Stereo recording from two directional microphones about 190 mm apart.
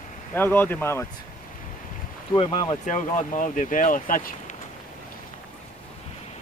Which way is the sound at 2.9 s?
45° left (ahead or behind).